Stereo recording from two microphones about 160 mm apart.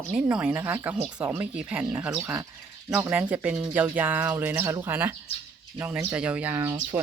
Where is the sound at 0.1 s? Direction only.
5° right (ahead or behind).